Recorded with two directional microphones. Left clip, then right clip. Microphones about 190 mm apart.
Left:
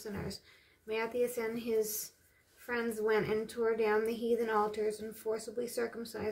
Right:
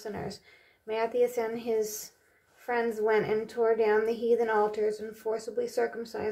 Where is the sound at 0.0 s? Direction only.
30° left (ahead or behind).